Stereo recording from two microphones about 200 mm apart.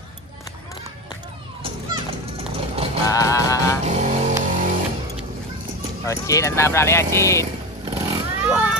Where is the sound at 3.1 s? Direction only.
15° left (ahead or behind).